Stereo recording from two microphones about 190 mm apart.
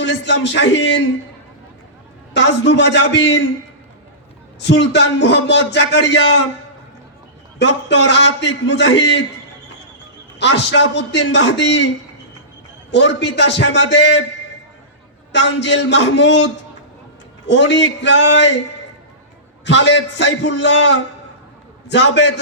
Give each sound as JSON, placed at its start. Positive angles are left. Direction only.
{"t": 0.0, "sound": "a man's voice", "side_deg": 65}
{"t": 2.3, "sound": "a man's voice", "side_deg": 65}
{"t": 4.6, "sound": "a man's voice", "side_deg": 65}
{"t": 7.6, "sound": "a man's voice", "side_deg": 65}
{"t": 10.4, "sound": "a man's voice", "side_deg": 65}
{"t": 12.9, "sound": "a man's voice", "side_deg": 65}
{"t": 15.3, "sound": "a man's voice", "side_deg": 65}
{"t": 19.6, "sound": "a man's voice", "side_deg": 70}